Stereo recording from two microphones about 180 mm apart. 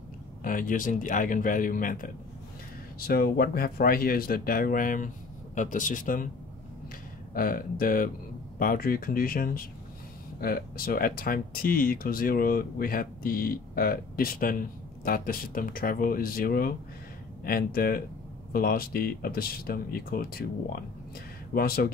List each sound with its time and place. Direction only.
0.4 s speech: 50° left (ahead or behind)
7.3 s speech: 50° left (ahead or behind)